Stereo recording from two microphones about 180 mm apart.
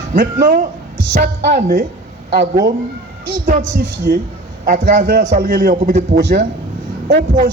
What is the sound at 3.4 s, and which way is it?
A man's voice, 60° right (ahead or behind).